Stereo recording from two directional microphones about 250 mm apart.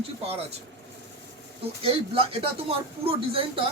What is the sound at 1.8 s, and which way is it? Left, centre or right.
Speech, right.